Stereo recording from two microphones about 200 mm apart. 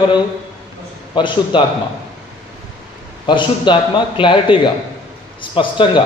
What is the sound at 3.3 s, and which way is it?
A man's voice, 25° left (ahead or behind).